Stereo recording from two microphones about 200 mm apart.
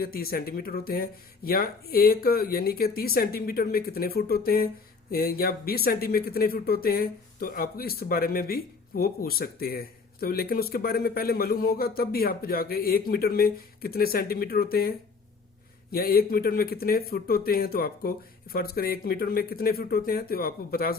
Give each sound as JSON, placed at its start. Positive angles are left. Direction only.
{"t": 0.0, "sound": "speech", "side_deg": 50}